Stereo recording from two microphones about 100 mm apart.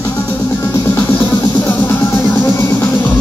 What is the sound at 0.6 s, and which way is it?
Music, 30° left (ahead or behind).